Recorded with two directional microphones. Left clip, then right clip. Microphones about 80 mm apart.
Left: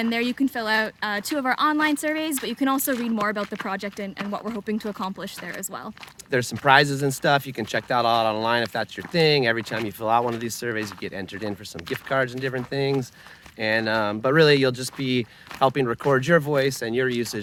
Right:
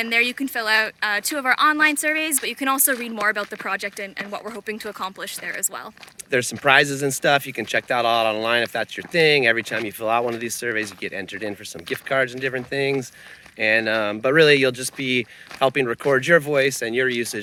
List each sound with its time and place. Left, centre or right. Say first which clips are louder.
0.0 s a woman's voice: right 4 dB; right
2.4 s a woman's voice: right 2 dB; right
6.3 s speech: right 1 dB; left
16.9 s speech: right 3 dB; centre